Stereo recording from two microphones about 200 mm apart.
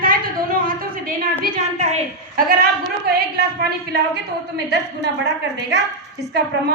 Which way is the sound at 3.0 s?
55° right (ahead or behind).